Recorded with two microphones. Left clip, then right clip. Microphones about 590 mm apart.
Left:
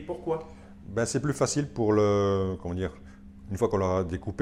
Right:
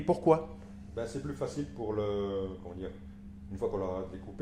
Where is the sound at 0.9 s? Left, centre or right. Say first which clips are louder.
Left 9 dB; left.